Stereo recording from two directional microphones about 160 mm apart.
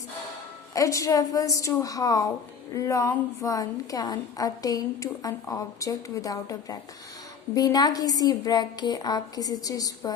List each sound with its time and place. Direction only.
0.7 s a woman's voice: 20° left (ahead or behind)